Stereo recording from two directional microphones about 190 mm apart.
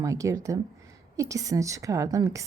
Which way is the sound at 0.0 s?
15° right (ahead or behind).